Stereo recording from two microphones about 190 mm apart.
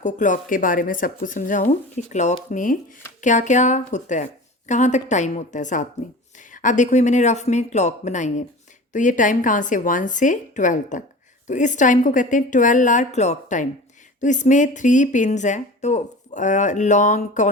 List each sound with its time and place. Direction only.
0.0 s speech: 40° left (ahead or behind)